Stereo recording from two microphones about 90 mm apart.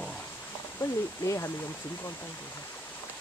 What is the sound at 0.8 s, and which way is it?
Speech, 35° left (ahead or behind).